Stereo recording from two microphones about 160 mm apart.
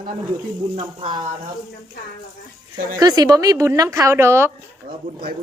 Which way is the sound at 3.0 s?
25° right (ahead or behind).